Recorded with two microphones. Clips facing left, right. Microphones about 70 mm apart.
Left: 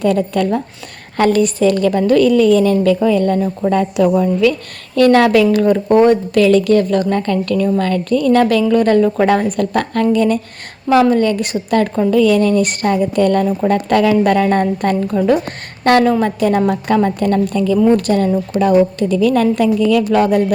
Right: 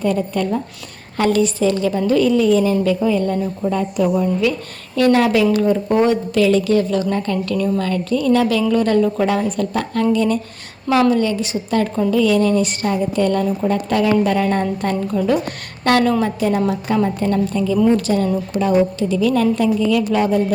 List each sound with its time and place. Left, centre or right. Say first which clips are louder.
0.0 s speech: left 4 dB; left
1.1 s a woman's voice: left 3 dB; left
3.7 s a woman's voice: left 5 dB; left
4.9 s a woman's voice: left 4 dB; left
16.2 s a woman's voice: left 4 dB; left
17.9 s a woman's voice: left 3 dB; left
19.6 s a woman's voice: left 3 dB; left